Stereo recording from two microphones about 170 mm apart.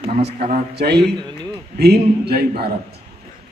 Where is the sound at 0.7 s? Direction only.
75° right (ahead or behind).